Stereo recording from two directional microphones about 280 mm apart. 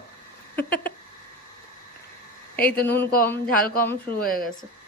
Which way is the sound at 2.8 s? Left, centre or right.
Centre.